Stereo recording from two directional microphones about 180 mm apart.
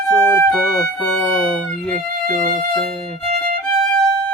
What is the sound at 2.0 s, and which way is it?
Speech, 45° right (ahead or behind).